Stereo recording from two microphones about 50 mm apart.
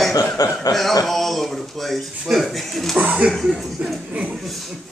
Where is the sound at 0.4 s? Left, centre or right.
Left.